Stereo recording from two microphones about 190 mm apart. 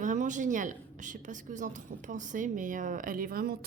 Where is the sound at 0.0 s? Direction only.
40° right (ahead or behind).